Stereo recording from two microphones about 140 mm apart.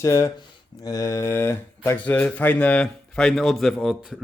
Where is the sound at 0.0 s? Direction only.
20° left (ahead or behind).